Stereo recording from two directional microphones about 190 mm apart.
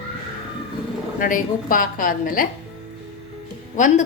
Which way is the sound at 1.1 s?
45° left (ahead or behind).